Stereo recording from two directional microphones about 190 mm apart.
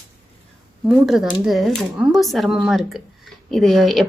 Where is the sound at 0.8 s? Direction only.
Centre (ahead or behind).